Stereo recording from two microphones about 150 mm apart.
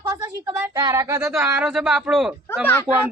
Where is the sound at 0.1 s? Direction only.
20° right (ahead or behind).